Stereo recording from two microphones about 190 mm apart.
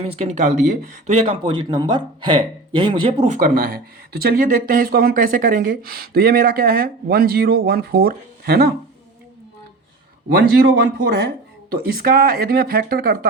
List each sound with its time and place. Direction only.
0.0 s speech: 35° right (ahead or behind); by 8.7 s 55° right (ahead or behind)
10.3 s speech: 60° right (ahead or behind)
11.7 s speech: 50° right (ahead or behind)